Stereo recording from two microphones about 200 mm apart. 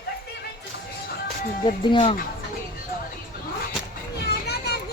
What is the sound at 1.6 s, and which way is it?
Speech, 25° left (ahead or behind).